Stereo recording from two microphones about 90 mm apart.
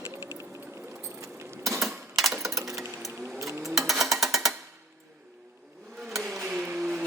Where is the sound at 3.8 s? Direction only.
Centre (ahead or behind).